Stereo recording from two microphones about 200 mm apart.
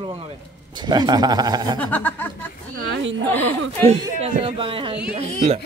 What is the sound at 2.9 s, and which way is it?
Speech, 65° right (ahead or behind).